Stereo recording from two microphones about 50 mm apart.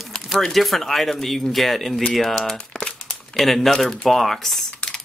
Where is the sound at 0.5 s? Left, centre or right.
Centre.